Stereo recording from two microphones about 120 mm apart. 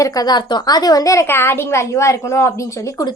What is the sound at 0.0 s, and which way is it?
A woman's voice, 35° left (ahead or behind).